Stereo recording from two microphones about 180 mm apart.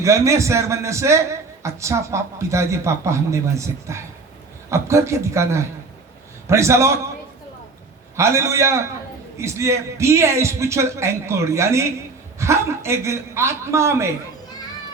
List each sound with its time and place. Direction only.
0.0 s a man's voice: 15° right (ahead or behind)
8.1 s a man's voice: 15° right (ahead or behind)